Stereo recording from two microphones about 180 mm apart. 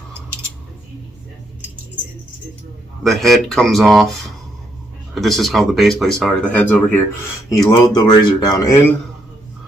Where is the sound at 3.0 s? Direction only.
Centre (ahead or behind).